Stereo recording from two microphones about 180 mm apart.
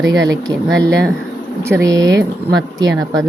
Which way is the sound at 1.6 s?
15° right (ahead or behind).